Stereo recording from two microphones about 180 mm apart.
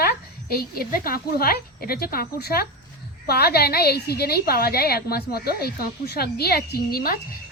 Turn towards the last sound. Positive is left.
turn(degrees=55)  # may be behind; listen again after turning